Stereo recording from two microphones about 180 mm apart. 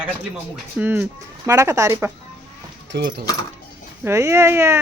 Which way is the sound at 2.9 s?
75° right (ahead or behind).